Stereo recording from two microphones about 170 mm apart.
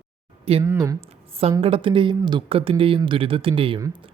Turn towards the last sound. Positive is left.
turn(degrees=-30)  # may be behind; listen again after turning